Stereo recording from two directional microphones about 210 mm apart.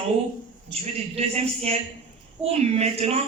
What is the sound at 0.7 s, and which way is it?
A man's voice, 30° right (ahead or behind).